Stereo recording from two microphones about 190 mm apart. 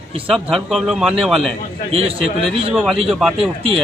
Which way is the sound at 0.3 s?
Centre (ahead or behind).